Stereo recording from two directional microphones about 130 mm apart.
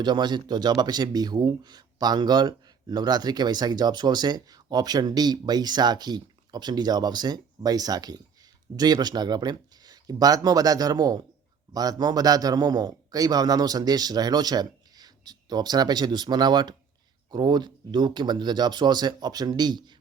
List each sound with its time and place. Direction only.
0.0 s speech: 35° right (ahead or behind)